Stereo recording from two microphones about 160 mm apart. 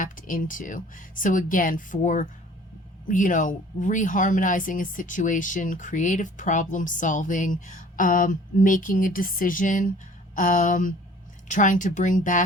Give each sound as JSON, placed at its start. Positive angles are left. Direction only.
{"t": 0.0, "sound": "a woman's voice", "side_deg": 60}